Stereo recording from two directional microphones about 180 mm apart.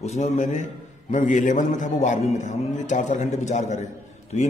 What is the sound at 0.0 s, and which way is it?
A man's voice, 40° left (ahead or behind).